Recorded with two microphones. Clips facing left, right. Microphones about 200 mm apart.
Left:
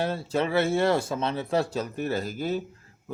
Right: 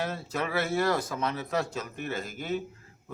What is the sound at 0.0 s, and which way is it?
Speech, 30° left (ahead or behind).